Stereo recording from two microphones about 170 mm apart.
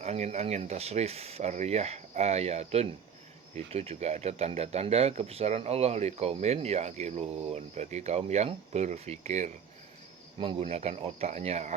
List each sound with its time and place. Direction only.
0.0 s speech: 40° right (ahead or behind)